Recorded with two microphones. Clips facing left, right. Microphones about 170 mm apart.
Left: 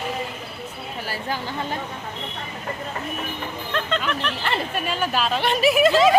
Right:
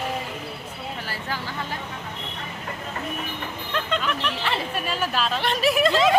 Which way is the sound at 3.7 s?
10° right (ahead or behind).